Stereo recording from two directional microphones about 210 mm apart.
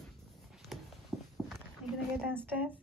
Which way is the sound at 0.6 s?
Centre (ahead or behind).